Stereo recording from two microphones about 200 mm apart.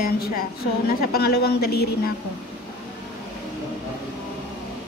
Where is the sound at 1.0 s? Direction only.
50° left (ahead or behind).